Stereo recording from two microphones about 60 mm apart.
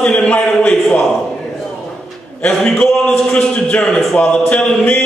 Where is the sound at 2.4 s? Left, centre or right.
Centre.